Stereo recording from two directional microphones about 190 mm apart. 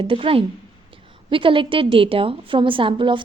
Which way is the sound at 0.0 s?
30° right (ahead or behind).